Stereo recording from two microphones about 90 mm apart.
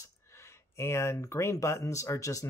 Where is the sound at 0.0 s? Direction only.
30° left (ahead or behind).